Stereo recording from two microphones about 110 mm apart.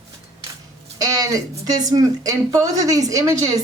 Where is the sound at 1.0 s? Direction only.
35° right (ahead or behind).